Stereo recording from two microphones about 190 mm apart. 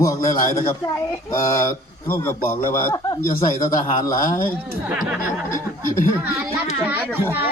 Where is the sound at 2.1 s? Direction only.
10° left (ahead or behind).